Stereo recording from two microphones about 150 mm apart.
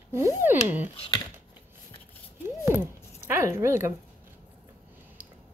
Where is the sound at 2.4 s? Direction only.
15° right (ahead or behind).